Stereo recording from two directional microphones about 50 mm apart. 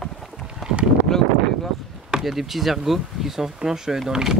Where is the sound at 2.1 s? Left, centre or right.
Centre.